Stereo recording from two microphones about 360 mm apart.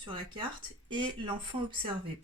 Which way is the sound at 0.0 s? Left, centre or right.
Centre.